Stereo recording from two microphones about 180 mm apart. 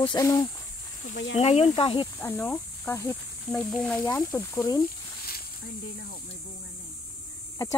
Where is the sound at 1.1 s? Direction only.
45° left (ahead or behind).